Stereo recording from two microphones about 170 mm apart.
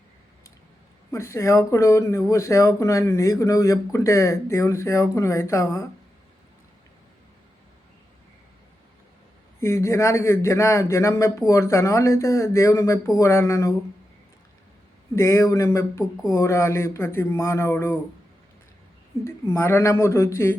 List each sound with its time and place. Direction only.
1.1 s speech: 15° left (ahead or behind)
9.6 s speech: 15° left (ahead or behind)
15.1 s speech: 15° left (ahead or behind)
19.2 s speech: 15° left (ahead or behind)